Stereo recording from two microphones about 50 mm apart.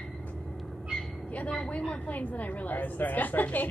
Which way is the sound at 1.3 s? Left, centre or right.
Left.